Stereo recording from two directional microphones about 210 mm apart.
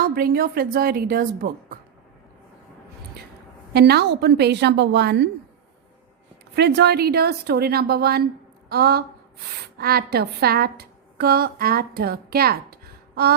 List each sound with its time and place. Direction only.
0.0 s speech: 45° right (ahead or behind)
3.7 s speech: 50° right (ahead or behind)
6.6 s a woman's voice: 55° right (ahead or behind)